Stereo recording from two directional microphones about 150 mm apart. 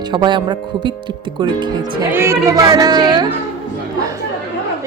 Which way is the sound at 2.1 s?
15° right (ahead or behind).